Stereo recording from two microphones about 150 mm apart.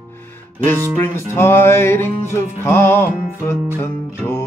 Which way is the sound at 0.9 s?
15° left (ahead or behind).